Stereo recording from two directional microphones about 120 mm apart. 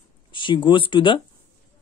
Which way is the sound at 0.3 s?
40° left (ahead or behind).